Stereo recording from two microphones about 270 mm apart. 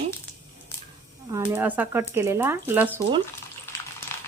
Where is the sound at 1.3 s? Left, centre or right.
Centre.